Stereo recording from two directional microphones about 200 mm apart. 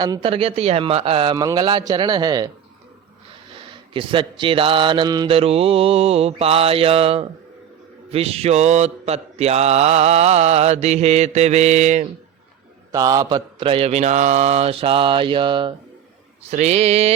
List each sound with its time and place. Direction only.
0.0 s speech: 25° right (ahead or behind)
3.5 s speech: 25° right (ahead or behind)
8.1 s mantra: 30° right (ahead or behind)
12.9 s speech: 20° right (ahead or behind)
16.5 s mantra: 35° right (ahead or behind)